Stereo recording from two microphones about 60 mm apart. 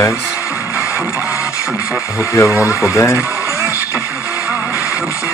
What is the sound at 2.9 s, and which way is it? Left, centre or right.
Speech, left.